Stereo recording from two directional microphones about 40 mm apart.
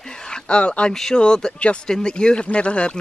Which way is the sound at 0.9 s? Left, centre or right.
Centre.